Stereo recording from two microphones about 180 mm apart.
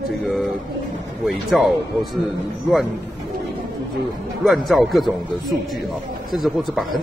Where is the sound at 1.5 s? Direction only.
Centre (ahead or behind).